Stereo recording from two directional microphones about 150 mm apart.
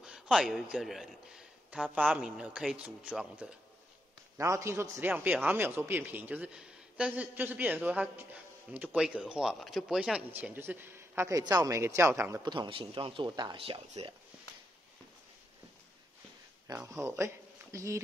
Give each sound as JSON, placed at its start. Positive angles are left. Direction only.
{"t": 0.0, "sound": "a man's voice", "side_deg": -5}
{"t": 4.4, "sound": "speech", "side_deg": -20}
{"t": 12.5, "sound": "speech", "side_deg": -35}
{"t": 16.6, "sound": "speech", "side_deg": -20}